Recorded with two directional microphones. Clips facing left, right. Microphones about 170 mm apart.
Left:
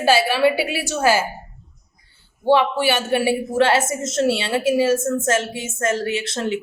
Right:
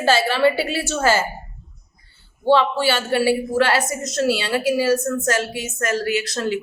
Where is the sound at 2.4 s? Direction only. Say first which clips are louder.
Even; 15° left (ahead or behind).